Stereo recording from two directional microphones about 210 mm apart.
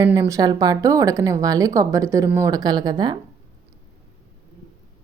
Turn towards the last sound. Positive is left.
turn(degrees=-20)  # may be behind; listen again after turning